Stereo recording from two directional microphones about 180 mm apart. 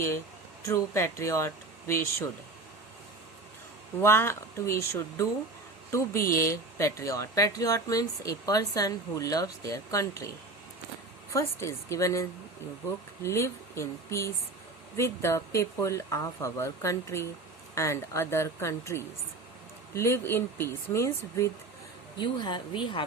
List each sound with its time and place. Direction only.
0.6 s speech: 15° left (ahead or behind)
4.0 s speech: 15° left (ahead or behind)
11.3 s speech: 15° left (ahead or behind)
13.2 s speech: 15° left (ahead or behind)